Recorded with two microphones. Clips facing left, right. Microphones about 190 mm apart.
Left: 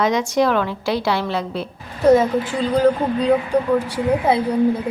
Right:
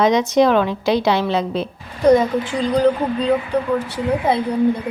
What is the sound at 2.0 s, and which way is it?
A woman's voice, 5° left (ahead or behind).